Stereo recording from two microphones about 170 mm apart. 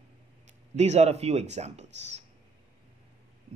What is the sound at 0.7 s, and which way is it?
A man's voice, 40° right (ahead or behind).